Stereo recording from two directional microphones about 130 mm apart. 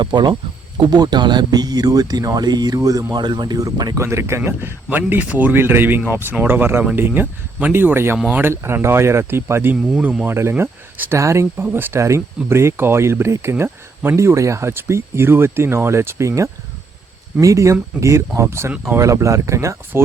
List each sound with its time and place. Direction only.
0.0 s speech: 35° right (ahead or behind)